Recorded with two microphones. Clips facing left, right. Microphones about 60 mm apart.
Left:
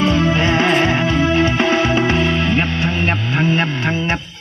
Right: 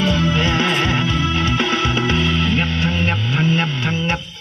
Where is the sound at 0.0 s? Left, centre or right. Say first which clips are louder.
Left 3 dB; left.